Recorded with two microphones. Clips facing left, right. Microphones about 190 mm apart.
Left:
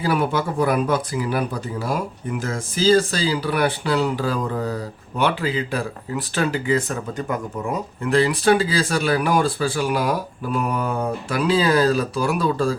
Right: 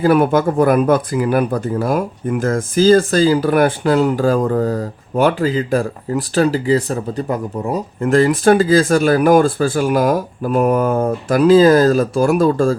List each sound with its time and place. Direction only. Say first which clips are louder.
0.0 s speech: right 8 dB; 50° right (ahead or behind); by 7.8 s 35° right (ahead or behind)
8.0 s speech: right 5 dB; 45° right (ahead or behind)